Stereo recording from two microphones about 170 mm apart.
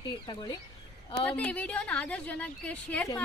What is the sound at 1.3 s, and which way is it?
A woman's voice, 10° left (ahead or behind).